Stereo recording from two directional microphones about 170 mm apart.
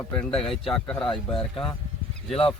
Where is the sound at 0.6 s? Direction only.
30° left (ahead or behind).